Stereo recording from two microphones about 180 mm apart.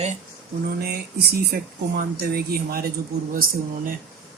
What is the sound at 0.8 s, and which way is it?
Speech, 60° right (ahead or behind).